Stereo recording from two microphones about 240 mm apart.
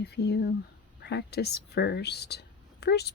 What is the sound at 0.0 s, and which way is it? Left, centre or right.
Speech, left.